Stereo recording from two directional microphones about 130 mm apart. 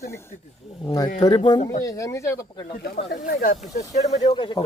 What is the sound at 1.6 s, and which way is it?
Speech, 70° left (ahead or behind).